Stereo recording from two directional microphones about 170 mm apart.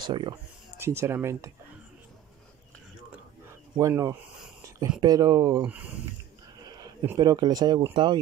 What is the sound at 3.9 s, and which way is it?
Speech, 20° right (ahead or behind).